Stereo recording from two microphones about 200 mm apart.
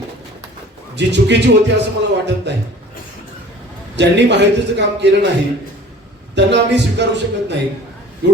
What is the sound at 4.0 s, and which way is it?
A man's voice, 60° right (ahead or behind).